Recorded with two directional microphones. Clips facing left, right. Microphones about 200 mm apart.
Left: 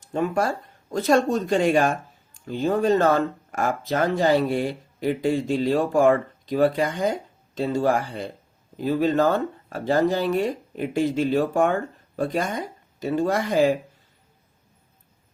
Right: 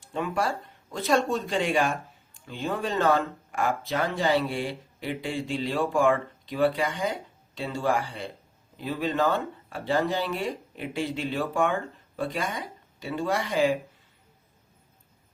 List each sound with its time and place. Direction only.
0.1 s speech: 45° left (ahead or behind)